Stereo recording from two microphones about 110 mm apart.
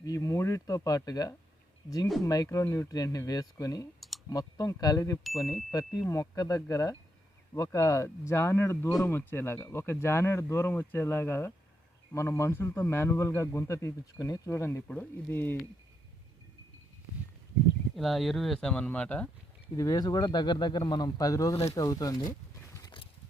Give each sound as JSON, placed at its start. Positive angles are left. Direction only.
{"t": 0.0, "sound": "a man's voice", "side_deg": 30}
{"t": 17.9, "sound": "speech", "side_deg": 0}
{"t": 19.7, "sound": "speech", "side_deg": 30}